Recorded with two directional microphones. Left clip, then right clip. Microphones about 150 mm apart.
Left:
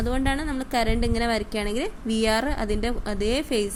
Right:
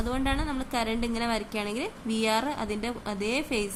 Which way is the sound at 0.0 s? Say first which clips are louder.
Left 3 dB; 20° left (ahead or behind).